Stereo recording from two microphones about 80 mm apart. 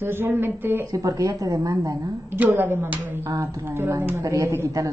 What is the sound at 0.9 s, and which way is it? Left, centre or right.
Speech, right.